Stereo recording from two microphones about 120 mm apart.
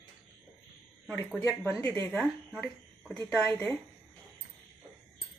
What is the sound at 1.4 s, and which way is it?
Speech, 25° left (ahead or behind).